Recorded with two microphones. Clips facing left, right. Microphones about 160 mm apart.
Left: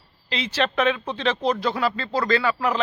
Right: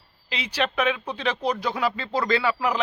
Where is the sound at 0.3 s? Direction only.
10° right (ahead or behind).